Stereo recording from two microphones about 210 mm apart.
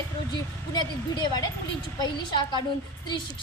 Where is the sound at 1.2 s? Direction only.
20° left (ahead or behind).